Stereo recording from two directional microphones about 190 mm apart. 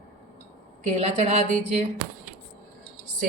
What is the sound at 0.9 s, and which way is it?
Speech, 30° right (ahead or behind).